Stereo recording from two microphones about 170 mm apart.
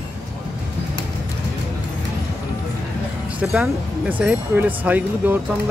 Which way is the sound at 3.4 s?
5° right (ahead or behind).